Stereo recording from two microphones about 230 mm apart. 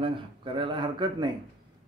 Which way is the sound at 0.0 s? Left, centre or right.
Right.